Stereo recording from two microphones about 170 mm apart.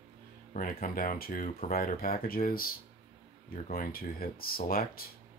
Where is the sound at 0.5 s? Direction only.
55° left (ahead or behind).